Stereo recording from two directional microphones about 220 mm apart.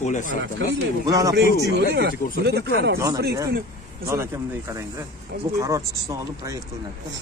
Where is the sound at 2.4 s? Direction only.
45° right (ahead or behind).